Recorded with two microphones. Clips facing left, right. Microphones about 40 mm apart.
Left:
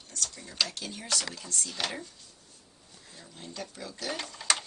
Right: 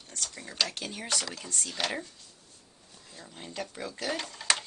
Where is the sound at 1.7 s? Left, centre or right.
Centre.